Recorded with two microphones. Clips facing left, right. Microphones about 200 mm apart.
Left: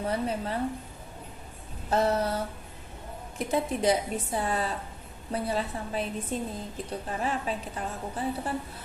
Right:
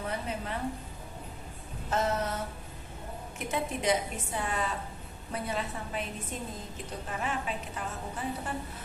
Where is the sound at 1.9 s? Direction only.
35° left (ahead or behind).